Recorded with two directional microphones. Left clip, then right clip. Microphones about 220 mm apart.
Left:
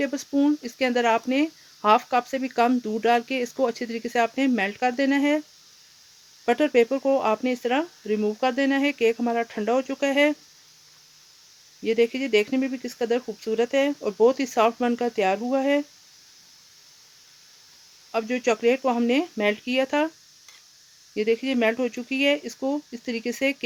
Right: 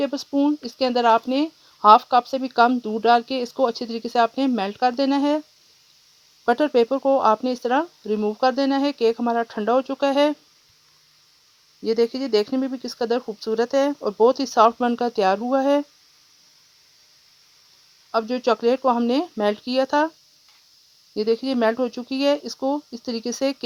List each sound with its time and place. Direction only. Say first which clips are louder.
0.0 s speech: right 2 dB; 25° right (ahead or behind)
6.4 s speech: right 2 dB; 25° right (ahead or behind)
11.8 s speech: right 1 dB; 25° right (ahead or behind)
18.1 s speech: right 3 dB; 25° right (ahead or behind)
21.2 s speech: right 2 dB; 25° right (ahead or behind)